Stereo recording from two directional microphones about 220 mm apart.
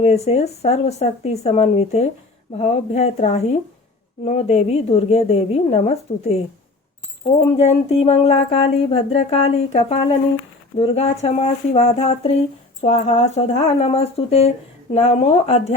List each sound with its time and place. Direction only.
0.0 s a woman's voice: 30° left (ahead or behind)
7.5 s a woman's voice: 30° left (ahead or behind)